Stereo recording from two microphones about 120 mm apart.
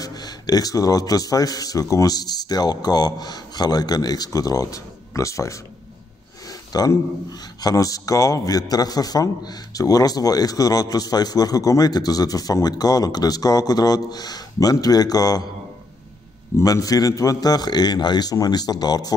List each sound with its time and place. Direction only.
0.0 s a man's voice: 35° left (ahead or behind)
6.7 s a man's voice: 30° left (ahead or behind)
16.5 s a man's voice: 30° left (ahead or behind)